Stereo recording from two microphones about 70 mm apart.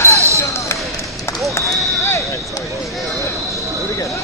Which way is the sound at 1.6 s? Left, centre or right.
Left.